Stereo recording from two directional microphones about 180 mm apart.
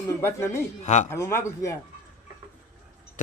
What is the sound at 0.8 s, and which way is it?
Speech, 40° left (ahead or behind).